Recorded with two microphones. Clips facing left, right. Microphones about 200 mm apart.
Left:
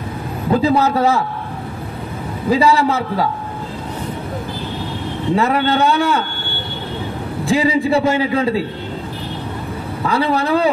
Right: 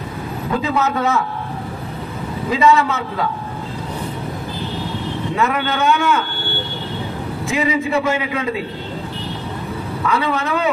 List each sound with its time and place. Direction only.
0.6 s a man's voice: 35° left (ahead or behind)
2.5 s a man's voice: 30° left (ahead or behind)
5.3 s a man's voice: 35° left (ahead or behind)
7.4 s a man's voice: 30° left (ahead or behind)
10.0 s a man's voice: 35° left (ahead or behind)